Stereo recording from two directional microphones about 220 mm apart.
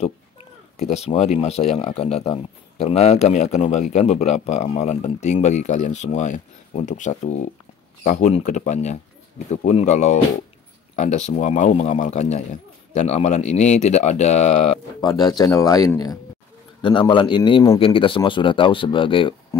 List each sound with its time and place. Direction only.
0.7 s a man's voice: 30° left (ahead or behind)
15.0 s a man's voice: 20° left (ahead or behind)